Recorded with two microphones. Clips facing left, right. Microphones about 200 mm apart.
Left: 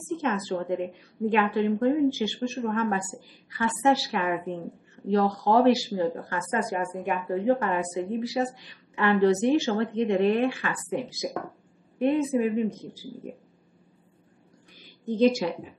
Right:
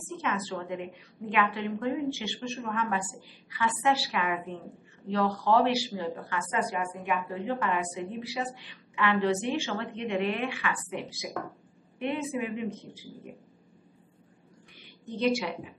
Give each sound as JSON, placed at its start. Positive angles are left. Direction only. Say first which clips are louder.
{"t": 0.2, "sound": "speech", "louder": "left 3 dB", "side_deg": 40}
{"t": 15.1, "sound": "a woman's voice", "louder": "left 6 dB", "side_deg": 45}